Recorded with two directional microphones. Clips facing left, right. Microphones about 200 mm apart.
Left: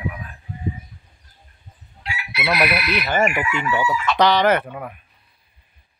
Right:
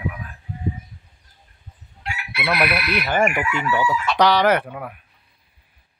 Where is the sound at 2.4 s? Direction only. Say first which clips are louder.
Left 1 dB; 5° left (ahead or behind).